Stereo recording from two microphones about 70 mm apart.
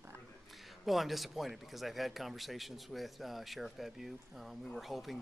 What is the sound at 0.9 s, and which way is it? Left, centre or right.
Speech, centre.